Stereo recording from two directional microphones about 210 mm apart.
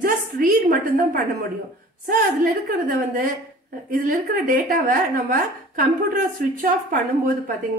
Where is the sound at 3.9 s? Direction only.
40° right (ahead or behind).